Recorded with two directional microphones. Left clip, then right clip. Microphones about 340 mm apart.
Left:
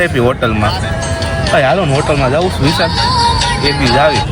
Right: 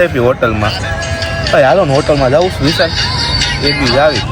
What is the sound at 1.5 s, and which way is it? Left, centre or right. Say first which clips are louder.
Speech: right 3 dB; centre.